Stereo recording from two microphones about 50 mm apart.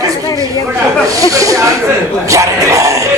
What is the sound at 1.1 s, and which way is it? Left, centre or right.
Speech, right.